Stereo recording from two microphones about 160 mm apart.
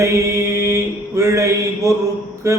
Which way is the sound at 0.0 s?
20° right (ahead or behind).